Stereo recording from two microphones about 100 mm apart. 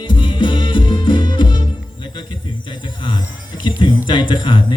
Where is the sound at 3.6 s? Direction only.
50° left (ahead or behind).